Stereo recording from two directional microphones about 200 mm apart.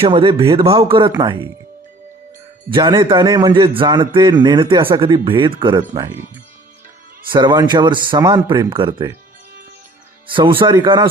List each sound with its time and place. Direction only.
0.0 s a man's voice: 25° right (ahead or behind)
2.6 s a man's voice: 25° right (ahead or behind)
10.2 s a man's voice: 25° right (ahead or behind)